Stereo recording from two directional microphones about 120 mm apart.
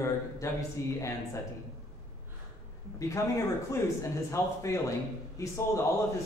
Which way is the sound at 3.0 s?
25° left (ahead or behind).